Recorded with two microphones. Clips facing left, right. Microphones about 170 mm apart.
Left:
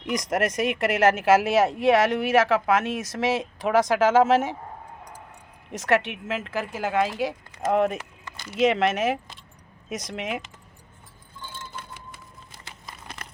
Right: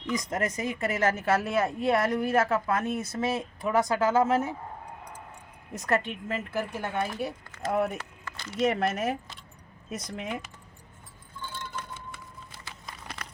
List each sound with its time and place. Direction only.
0.0 s speech: 90° left
5.7 s speech: 85° left
7.9 s a sound: 15° left (ahead or behind)
8.5 s speech: 90° left